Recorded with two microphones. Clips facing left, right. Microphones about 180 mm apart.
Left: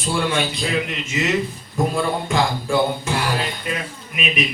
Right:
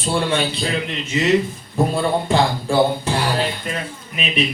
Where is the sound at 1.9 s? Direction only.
35° right (ahead or behind).